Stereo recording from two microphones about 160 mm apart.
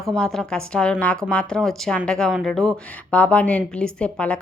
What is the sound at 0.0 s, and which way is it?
A woman's voice, centre (ahead or behind).